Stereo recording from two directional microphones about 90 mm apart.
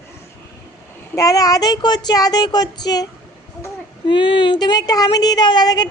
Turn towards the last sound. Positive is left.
turn(degrees=50)  # may be behind; listen again after turning